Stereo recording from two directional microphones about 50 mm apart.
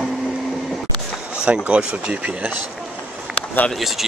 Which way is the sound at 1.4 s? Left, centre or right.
Right.